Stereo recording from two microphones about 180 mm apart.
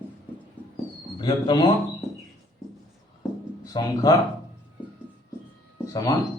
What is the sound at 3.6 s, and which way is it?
Speech, 20° left (ahead or behind).